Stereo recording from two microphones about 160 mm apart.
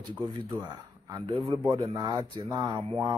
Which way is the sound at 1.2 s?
35° right (ahead or behind).